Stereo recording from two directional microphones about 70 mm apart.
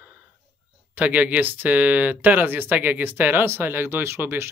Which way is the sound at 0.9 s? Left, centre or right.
Right.